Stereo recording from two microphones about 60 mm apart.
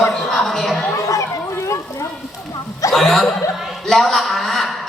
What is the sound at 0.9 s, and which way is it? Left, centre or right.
Children playing, left.